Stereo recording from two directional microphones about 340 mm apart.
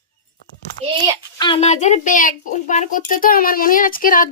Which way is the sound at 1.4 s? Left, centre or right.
Centre.